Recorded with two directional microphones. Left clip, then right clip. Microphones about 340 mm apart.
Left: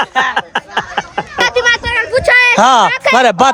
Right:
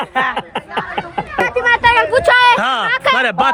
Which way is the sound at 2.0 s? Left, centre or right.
Centre.